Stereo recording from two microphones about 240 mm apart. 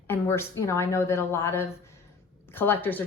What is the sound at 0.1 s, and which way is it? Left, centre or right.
A woman's voice, centre.